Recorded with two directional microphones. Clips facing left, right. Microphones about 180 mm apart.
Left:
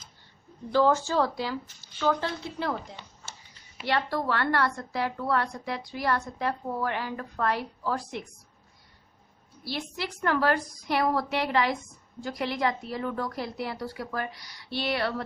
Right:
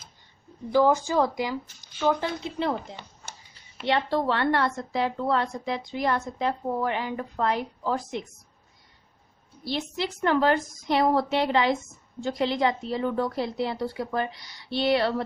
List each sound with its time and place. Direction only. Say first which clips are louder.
0.7 s a woman's voice: right 2 dB; 15° right (ahead or behind)
9.6 s a woman's voice: right 4 dB; 20° right (ahead or behind)